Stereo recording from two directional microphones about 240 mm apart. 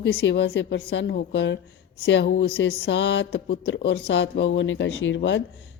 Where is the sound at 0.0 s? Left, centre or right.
Left.